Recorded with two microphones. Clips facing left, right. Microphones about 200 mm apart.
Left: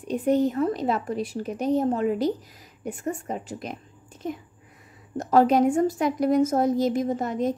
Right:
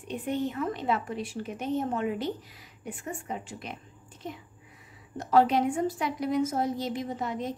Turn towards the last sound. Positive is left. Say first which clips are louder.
# left 7 dB
turn(degrees=45)  # may be behind; listen again after turning